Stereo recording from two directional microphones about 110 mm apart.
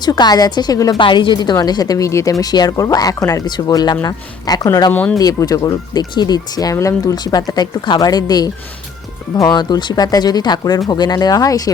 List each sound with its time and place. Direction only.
0.0 s speech: 40° left (ahead or behind)
0.9 s speech: 50° left (ahead or behind)
4.9 s speech: 15° left (ahead or behind)
5.1 s speech: 35° left (ahead or behind)